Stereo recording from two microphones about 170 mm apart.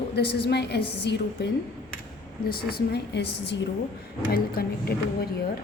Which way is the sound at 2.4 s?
65° left (ahead or behind).